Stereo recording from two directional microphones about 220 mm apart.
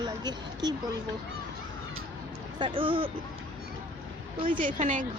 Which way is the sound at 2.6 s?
25° right (ahead or behind).